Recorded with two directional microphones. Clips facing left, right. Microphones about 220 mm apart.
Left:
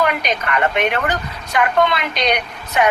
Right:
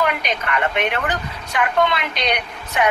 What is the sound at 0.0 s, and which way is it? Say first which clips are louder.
A woman's voice: left 2 dB; 45° left (ahead or behind).